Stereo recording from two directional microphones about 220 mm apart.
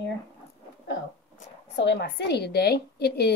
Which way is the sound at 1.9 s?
50° left (ahead or behind).